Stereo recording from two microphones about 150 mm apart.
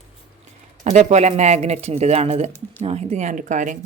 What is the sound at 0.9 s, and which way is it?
Speech, 50° right (ahead or behind).